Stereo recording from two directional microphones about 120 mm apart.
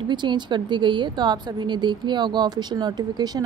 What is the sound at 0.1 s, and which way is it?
A woman's voice, 40° right (ahead or behind).